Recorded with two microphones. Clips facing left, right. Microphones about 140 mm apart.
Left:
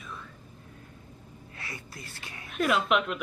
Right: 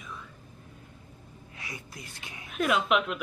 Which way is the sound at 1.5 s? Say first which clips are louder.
Even; 15° right (ahead or behind).